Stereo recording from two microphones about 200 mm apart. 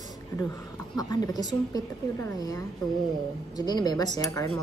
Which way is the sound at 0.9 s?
20° left (ahead or behind).